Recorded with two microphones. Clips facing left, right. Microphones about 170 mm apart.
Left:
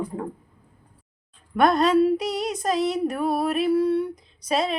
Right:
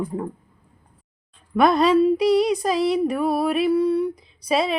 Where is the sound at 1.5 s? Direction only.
Centre (ahead or behind).